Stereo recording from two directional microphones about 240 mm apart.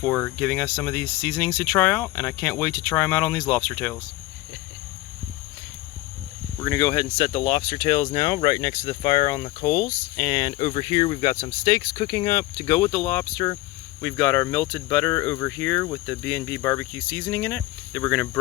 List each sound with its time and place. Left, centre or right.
0.0 s speech: centre
6.6 s speech: centre